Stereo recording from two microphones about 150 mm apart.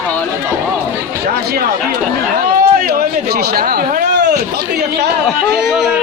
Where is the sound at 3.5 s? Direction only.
75° right (ahead or behind).